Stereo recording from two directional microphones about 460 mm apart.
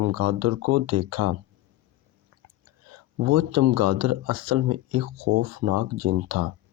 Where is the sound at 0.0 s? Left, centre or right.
Right.